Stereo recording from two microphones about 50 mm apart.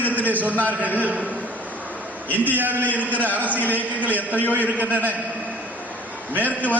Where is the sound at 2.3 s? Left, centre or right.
Right.